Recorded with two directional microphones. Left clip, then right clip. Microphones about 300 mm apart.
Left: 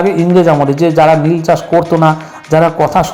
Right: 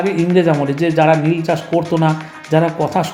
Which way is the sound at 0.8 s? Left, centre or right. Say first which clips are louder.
Left 3 dB; centre.